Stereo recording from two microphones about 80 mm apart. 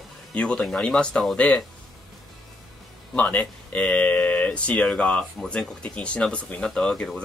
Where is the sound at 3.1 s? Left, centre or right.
Centre.